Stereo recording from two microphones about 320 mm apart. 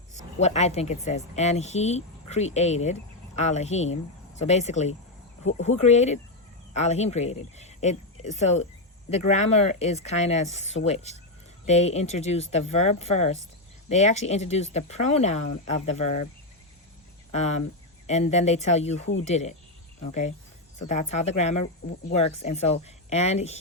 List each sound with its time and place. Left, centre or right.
0.3 s speech: left
18.0 s speech: centre